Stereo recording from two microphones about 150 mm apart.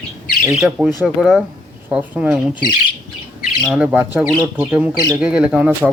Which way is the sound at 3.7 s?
10° right (ahead or behind).